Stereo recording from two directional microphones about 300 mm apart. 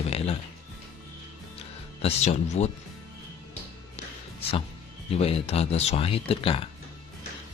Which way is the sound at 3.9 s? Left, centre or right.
Centre.